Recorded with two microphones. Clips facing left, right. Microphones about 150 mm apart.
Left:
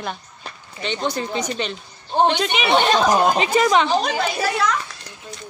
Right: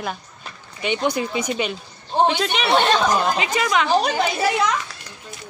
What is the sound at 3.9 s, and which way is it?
Speech, 10° right (ahead or behind).